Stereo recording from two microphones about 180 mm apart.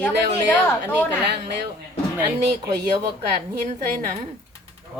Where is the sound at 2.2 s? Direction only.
20° right (ahead or behind).